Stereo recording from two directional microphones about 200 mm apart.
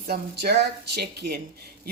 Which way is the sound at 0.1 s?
55° right (ahead or behind).